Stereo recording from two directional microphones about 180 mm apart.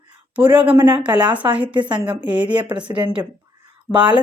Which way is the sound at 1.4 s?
25° right (ahead or behind).